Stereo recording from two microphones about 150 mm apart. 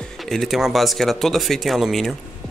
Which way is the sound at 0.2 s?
Centre (ahead or behind).